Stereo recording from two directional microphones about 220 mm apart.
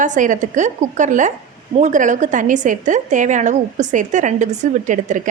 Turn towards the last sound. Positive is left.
turn(degrees=-35)  # may be behind; listen again after turning